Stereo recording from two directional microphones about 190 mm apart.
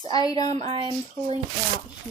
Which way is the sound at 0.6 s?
30° right (ahead or behind).